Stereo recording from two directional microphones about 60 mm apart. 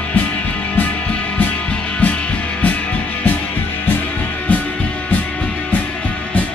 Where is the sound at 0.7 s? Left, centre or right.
Left.